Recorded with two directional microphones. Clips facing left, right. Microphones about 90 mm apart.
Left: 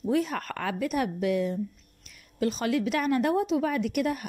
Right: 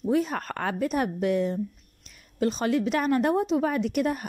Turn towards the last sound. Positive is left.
turn(degrees=-35)  # may be behind; listen again after turning